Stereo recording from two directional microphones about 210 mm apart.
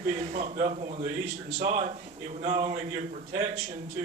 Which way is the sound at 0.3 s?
35° right (ahead or behind).